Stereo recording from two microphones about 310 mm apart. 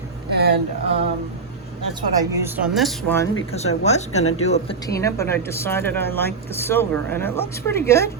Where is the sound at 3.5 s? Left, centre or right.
Left.